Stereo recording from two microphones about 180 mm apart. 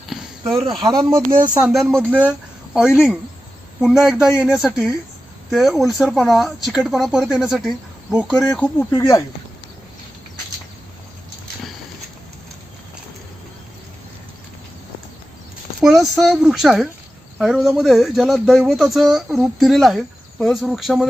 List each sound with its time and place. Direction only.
0.1 s a sound: centre (ahead or behind)
0.8 s speech: 20° right (ahead or behind)
1.5 s speech: 10° right (ahead or behind)
3.8 s speech: centre (ahead or behind)
8.3 s speech: 10° left (ahead or behind)
8.9 s speech: 20° left (ahead or behind)
15.8 s speech: centre (ahead or behind)